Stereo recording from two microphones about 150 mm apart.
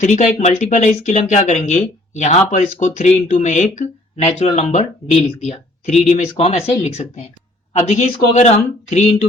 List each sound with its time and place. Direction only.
0.0 s speech: 55° left (ahead or behind)